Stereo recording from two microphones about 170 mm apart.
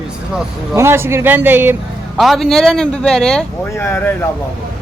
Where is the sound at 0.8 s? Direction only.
15° right (ahead or behind).